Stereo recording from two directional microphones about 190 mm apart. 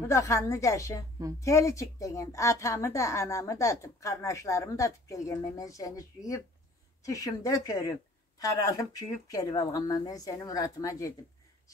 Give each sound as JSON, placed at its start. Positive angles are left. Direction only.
{"t": 0.0, "sound": "a woman's voice", "side_deg": 15}